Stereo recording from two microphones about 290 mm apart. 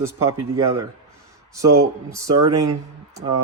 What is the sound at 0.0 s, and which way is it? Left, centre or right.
Speech, centre.